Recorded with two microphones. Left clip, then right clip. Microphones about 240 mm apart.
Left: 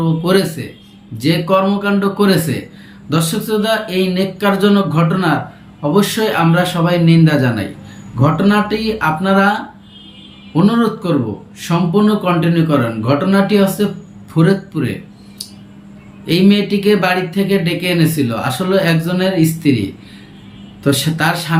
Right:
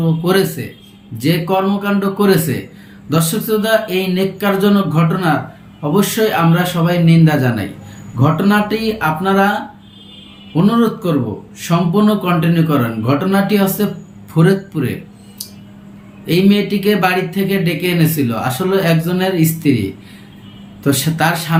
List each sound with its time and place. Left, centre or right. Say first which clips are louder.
0.0 s speech: even; centre
16.2 s speech: even; centre
20.8 s speech: even; centre